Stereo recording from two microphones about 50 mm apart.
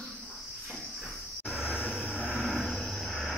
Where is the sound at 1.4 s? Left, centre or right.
Centre.